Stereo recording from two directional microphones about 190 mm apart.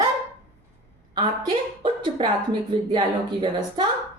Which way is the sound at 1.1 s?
25° right (ahead or behind).